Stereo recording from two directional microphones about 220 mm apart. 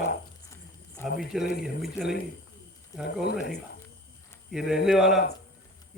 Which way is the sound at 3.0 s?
50° left (ahead or behind).